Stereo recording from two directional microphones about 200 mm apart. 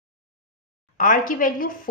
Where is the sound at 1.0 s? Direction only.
45° left (ahead or behind).